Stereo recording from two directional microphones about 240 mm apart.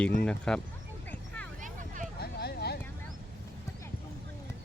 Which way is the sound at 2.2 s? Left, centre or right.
Left.